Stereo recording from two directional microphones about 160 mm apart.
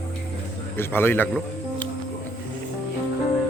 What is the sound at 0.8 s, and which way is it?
Speech, 15° left (ahead or behind).